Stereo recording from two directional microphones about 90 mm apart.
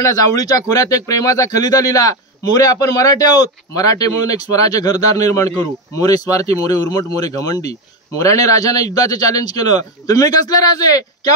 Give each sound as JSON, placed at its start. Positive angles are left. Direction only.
{"t": 0.0, "sound": "speech", "side_deg": 40}